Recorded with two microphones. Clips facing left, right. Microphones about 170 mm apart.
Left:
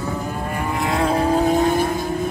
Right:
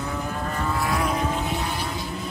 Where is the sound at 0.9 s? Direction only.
30° left (ahead or behind).